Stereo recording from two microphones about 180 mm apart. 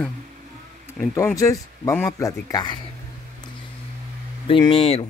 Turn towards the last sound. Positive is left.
turn(degrees=30)  # may be behind; listen again after turning